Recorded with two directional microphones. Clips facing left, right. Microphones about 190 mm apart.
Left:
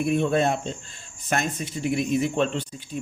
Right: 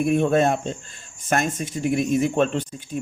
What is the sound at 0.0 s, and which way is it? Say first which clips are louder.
Speech: right 3 dB; 50° right (ahead or behind).